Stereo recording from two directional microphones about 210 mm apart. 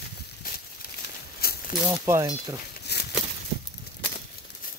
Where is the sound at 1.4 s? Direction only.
45° left (ahead or behind).